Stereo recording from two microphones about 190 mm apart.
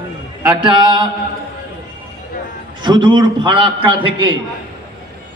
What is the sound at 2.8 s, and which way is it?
A man's voice, 25° right (ahead or behind).